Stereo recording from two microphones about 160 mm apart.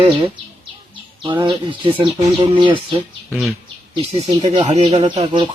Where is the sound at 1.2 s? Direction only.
30° right (ahead or behind).